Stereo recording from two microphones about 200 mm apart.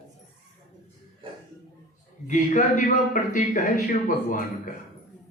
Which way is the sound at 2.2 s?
40° left (ahead or behind).